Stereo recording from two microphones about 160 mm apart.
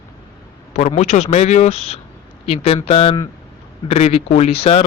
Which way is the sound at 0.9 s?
45° left (ahead or behind).